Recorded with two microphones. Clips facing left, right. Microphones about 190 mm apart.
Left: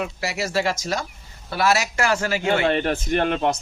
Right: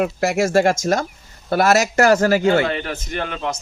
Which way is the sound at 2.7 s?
35° left (ahead or behind).